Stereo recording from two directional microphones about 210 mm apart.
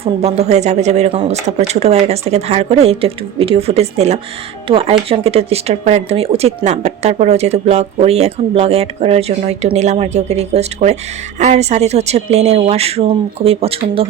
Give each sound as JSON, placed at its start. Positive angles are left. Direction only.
{"t": 0.0, "sound": "speech", "side_deg": -30}